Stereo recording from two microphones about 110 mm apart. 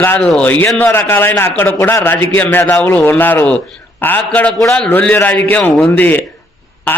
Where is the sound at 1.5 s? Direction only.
20° left (ahead or behind).